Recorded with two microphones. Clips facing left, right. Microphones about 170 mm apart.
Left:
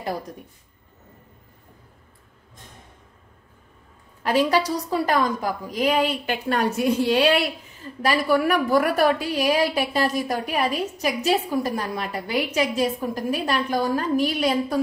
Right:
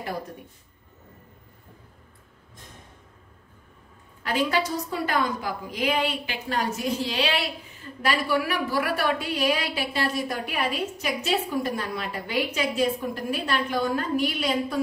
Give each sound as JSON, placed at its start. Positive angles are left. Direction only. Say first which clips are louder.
{"t": 4.3, "sound": "a woman's voice", "louder": "left 5 dB", "side_deg": 40}
{"t": 8.0, "sound": "a woman's voice", "louder": "left 4 dB", "side_deg": 40}